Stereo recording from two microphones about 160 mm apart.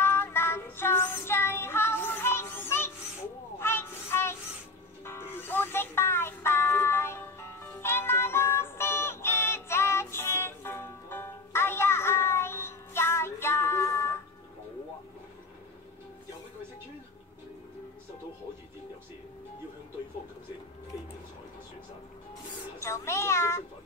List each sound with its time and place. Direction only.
0.0 s child singing: 15° left (ahead or behind)
5.0 s music: 15° left (ahead or behind)
22.8 s a sound: 15° left (ahead or behind)